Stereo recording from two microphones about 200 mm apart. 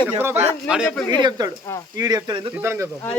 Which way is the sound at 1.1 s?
20° right (ahead or behind).